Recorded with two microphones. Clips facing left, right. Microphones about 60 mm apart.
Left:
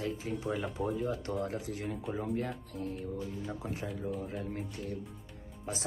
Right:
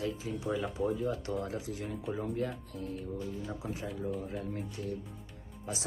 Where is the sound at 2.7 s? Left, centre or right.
Left.